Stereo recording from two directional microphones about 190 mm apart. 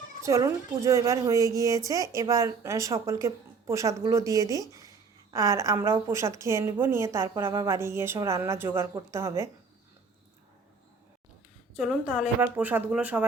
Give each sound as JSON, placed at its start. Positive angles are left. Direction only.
{"t": 0.2, "sound": "a woman's voice", "side_deg": -15}
{"t": 11.8, "sound": "a woman's voice", "side_deg": -5}